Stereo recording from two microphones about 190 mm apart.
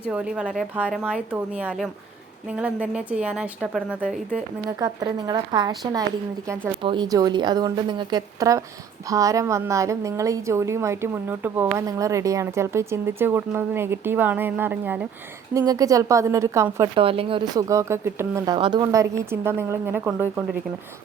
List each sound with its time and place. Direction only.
0.1 s a woman's voice: 5° right (ahead or behind)
4.8 s a woman's voice: 20° right (ahead or behind)
16.9 s a woman's voice: 30° right (ahead or behind); by 20.6 s 10° right (ahead or behind)